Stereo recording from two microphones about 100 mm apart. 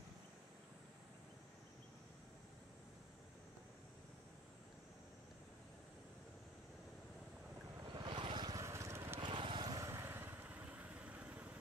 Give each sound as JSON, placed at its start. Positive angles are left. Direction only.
{"t": 7.8, "sound": "boat", "side_deg": -45}
{"t": 8.6, "sound": "vehicle", "side_deg": -30}
{"t": 9.2, "sound": "vehicle", "side_deg": -55}
{"t": 9.7, "sound": "vehicle", "side_deg": -30}